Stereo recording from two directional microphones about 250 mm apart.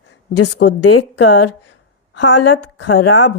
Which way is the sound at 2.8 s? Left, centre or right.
Left.